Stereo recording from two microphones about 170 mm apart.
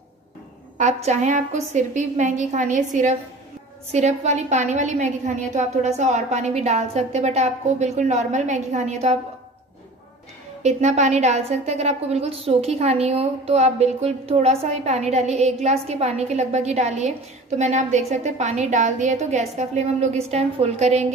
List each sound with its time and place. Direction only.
0.7 s a woman's voice: 45° right (ahead or behind)
10.6 s a woman's voice: 40° right (ahead or behind)